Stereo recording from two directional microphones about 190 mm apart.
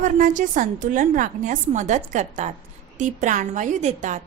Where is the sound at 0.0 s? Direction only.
40° right (ahead or behind).